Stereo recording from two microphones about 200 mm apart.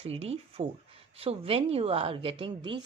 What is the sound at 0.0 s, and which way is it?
Speech, 30° right (ahead or behind).